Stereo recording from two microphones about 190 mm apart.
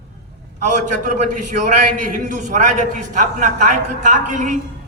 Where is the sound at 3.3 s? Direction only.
40° right (ahead or behind).